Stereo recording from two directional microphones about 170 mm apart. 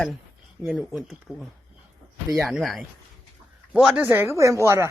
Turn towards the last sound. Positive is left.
turn(degrees=-15)  # may be behind; listen again after turning